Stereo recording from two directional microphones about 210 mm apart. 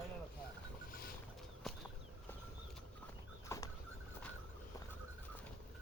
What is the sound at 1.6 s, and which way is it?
Bird flight, centre (ahead or behind).